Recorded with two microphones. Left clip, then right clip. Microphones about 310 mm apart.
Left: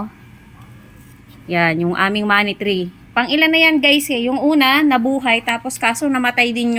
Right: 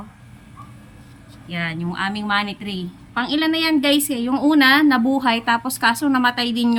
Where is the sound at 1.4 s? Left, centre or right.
Centre.